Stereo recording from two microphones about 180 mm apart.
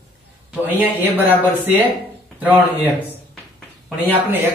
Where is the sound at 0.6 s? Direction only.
10° right (ahead or behind).